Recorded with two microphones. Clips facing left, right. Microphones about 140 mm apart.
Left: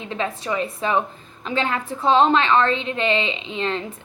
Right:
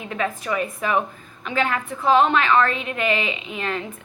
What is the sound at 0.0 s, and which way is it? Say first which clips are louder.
A woman's voice: even; 25° left (ahead or behind).